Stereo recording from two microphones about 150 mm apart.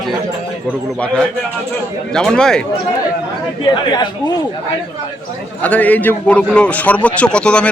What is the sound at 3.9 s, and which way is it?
Speech, 30° left (ahead or behind).